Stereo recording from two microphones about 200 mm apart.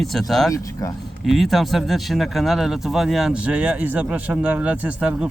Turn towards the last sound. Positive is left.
turn(degrees=-5)  # may be behind; listen again after turning